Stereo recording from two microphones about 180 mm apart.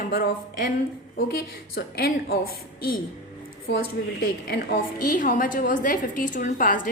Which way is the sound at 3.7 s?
60° left (ahead or behind).